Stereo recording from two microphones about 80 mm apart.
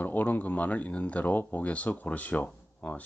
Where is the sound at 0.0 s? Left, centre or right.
Left.